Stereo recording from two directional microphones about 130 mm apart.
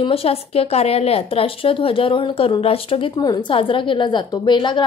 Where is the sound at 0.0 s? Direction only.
50° left (ahead or behind).